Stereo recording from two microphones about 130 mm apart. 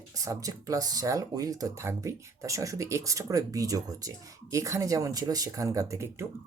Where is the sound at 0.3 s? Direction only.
25° right (ahead or behind).